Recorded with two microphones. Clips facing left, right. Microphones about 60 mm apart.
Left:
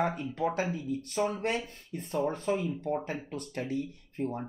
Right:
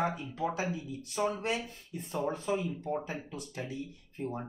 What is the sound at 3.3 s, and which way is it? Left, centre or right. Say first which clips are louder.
Speech: left 5 dB; left.